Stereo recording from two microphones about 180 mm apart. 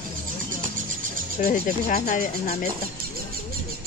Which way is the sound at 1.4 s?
50° left (ahead or behind).